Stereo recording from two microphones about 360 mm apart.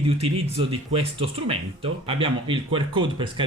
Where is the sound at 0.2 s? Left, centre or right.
Centre.